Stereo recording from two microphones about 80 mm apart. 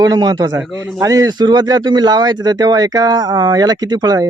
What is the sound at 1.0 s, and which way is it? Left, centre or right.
Speech, right.